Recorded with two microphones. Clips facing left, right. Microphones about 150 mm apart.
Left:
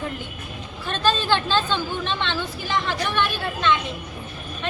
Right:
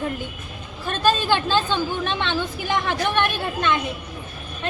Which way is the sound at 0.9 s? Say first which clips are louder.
Right 2 dB; 10° right (ahead or behind).